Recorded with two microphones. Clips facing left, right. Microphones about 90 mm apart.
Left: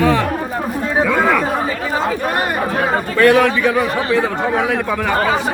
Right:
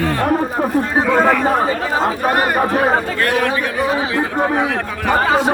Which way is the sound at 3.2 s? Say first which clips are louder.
Left 5 dB; 90° left.